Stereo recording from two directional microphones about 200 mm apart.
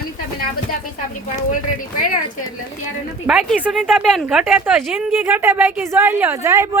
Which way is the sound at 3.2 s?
Centre (ahead or behind).